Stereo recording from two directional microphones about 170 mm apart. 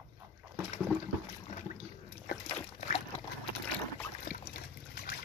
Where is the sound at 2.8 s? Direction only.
40° left (ahead or behind).